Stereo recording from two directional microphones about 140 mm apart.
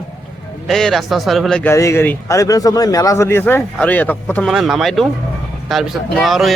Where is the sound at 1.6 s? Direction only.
20° left (ahead or behind).